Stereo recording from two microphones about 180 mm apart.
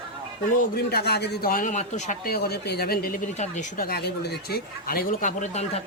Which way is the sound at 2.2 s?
60° left (ahead or behind).